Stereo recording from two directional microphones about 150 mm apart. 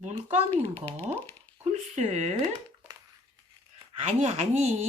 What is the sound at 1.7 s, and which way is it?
Speech, 50° right (ahead or behind).